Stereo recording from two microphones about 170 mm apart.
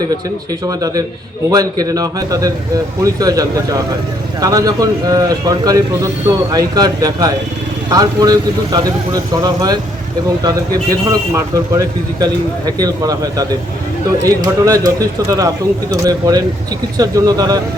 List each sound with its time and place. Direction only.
0.6 s a man's voice: 20° right (ahead or behind)
10.8 s a man's voice: 20° right (ahead or behind)